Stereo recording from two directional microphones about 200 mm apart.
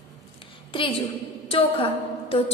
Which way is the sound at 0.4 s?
25° left (ahead or behind).